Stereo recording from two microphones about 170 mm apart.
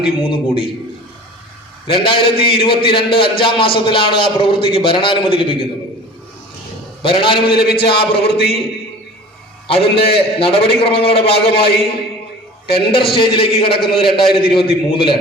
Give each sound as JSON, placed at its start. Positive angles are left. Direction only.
{"t": 0.2, "sound": "a man's voice", "side_deg": 30}
{"t": 1.9, "sound": "a man's voice", "side_deg": 30}
{"t": 7.0, "sound": "a man's voice", "side_deg": 30}
{"t": 9.6, "sound": "a man's voice", "side_deg": 30}
{"t": 12.7, "sound": "a man's voice", "side_deg": 30}